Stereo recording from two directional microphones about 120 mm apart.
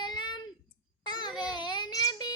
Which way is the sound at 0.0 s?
40° left (ahead or behind).